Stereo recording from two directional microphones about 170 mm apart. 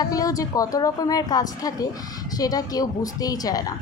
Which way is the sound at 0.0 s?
20° left (ahead or behind).